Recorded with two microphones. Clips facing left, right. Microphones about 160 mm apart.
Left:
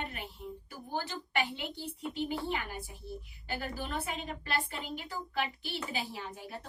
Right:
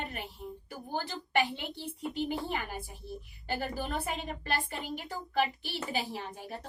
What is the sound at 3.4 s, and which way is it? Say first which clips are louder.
Speech: right 4 dB; 40° right (ahead or behind).